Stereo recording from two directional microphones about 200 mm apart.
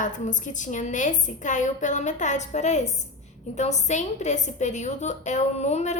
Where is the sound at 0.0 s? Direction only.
40° left (ahead or behind).